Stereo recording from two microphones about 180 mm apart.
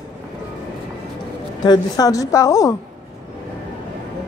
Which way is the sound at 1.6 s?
20° left (ahead or behind).